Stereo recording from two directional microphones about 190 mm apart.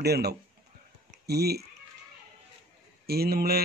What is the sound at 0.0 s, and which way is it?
A man's voice, 60° right (ahead or behind).